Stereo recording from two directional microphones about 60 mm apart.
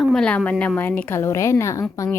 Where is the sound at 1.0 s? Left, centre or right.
Left.